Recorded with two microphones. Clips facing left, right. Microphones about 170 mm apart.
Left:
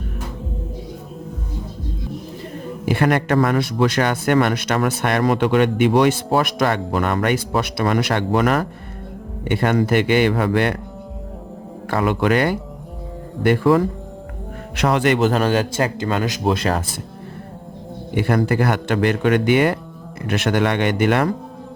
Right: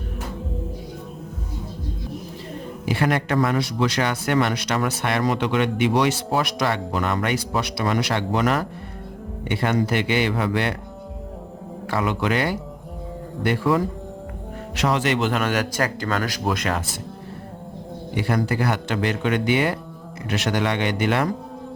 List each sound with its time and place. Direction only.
2.8 s speech: 55° left (ahead or behind)
11.9 s speech: 50° left (ahead or behind)
15.3 s speech: 30° left (ahead or behind)
18.1 s speech: 55° left (ahead or behind)